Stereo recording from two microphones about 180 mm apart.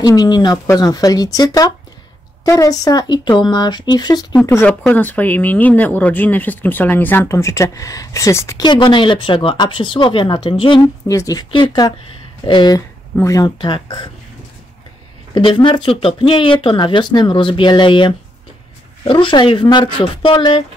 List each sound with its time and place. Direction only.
0.0 s speech: 20° left (ahead or behind)
4.5 s speech: 10° left (ahead or behind)
15.3 s speech: 30° left (ahead or behind)